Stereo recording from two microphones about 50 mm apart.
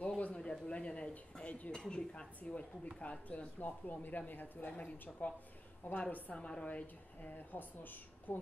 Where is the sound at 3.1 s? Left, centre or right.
Left.